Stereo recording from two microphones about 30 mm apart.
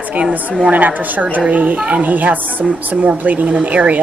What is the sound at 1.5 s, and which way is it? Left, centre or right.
A woman's voice, right.